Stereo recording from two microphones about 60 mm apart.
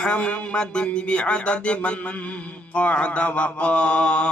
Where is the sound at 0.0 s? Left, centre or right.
Centre.